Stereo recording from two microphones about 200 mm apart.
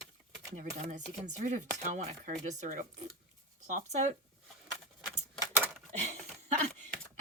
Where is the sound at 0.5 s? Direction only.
40° right (ahead or behind).